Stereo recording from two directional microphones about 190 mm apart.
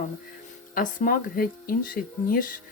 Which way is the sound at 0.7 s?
45° left (ahead or behind).